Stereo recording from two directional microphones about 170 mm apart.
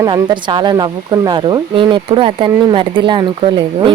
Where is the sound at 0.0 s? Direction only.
25° right (ahead or behind).